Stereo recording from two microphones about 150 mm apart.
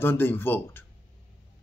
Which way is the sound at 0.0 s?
15° left (ahead or behind).